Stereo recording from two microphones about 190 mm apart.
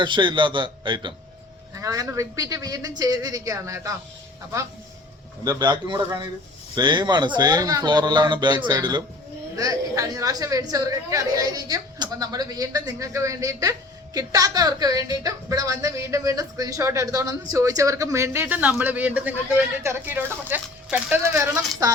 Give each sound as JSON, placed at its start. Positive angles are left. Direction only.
{"t": 0.0, "sound": "a woman's voice", "side_deg": -25}
{"t": 5.5, "sound": "a woman's voice", "side_deg": -25}